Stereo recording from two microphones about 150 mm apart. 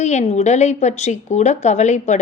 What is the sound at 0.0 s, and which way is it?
Speech, 50° left (ahead or behind).